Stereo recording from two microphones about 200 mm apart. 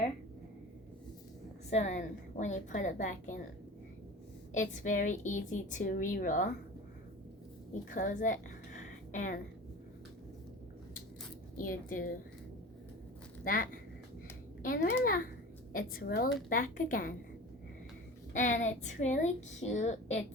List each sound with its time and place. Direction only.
1.7 s a woman's voice: 35° left (ahead or behind)
4.5 s a woman's voice: 40° left (ahead or behind)
7.7 s a woman's voice: 40° left (ahead or behind)
11.5 s a woman's voice: 45° left (ahead or behind)
13.4 s a woman's voice: 45° left (ahead or behind)
18.3 s a woman's voice: 40° left (ahead or behind)